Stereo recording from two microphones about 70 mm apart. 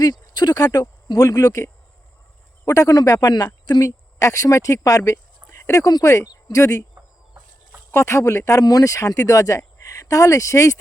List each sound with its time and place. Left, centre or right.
0.0 s speech: left
4.2 s speech: left
5.1 s speech: left
6.9 s a sound: centre
7.9 s speech: left